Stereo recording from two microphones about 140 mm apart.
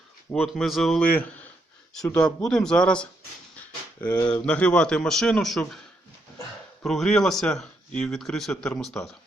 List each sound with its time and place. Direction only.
0.3 s speech: centre (ahead or behind)
4.1 s speech: 30° left (ahead or behind)
4.4 s speech: 10° left (ahead or behind)
6.8 s speech: 5° left (ahead or behind)